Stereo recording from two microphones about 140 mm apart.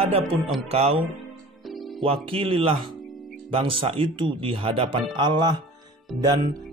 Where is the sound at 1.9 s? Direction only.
40° right (ahead or behind).